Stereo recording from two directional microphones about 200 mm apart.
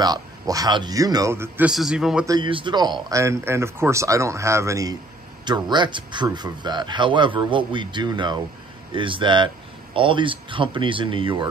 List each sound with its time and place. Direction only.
0.0 s speech: 20° right (ahead or behind); by 2.2 s 5° right (ahead or behind)
2.2 s a man's voice: 20° right (ahead or behind)